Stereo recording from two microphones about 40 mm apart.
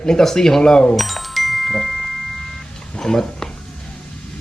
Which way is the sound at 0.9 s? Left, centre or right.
Centre.